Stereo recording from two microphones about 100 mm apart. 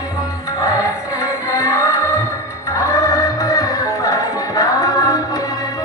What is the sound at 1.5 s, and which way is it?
Music, 30° left (ahead or behind).